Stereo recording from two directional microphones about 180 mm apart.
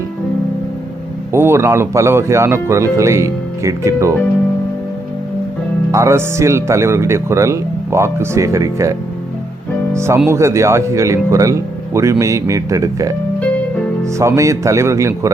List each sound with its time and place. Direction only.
1.3 s speech: 15° right (ahead or behind)
5.9 s speech: 15° right (ahead or behind)
14.2 s speech: 15° right (ahead or behind)